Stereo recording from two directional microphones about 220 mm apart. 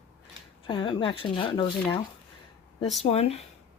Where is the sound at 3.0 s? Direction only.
30° left (ahead or behind).